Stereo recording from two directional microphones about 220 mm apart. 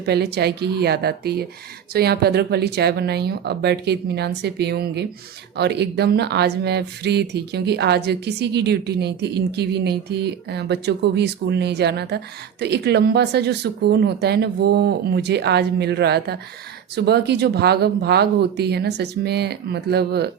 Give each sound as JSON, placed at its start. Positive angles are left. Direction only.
{"t": 0.0, "sound": "speech", "side_deg": -50}